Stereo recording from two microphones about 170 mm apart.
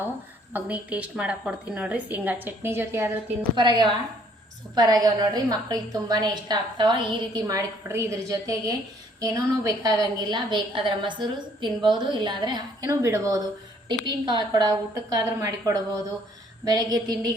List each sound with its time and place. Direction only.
0.5 s a woman's voice: 10° right (ahead or behind)
3.5 s a woman's voice: 25° right (ahead or behind)